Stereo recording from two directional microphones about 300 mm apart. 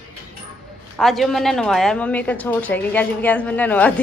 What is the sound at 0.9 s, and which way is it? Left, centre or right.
A woman's voice, centre.